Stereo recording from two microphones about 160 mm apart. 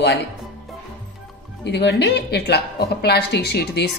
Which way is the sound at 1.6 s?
90° left.